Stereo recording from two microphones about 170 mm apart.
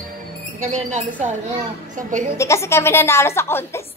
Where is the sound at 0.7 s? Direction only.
45° right (ahead or behind).